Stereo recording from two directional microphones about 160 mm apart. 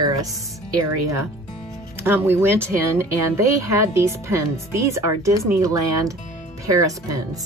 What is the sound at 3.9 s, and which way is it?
Speech, 15° right (ahead or behind).